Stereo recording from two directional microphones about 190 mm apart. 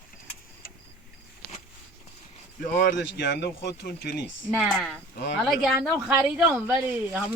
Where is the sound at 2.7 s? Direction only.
65° left (ahead or behind).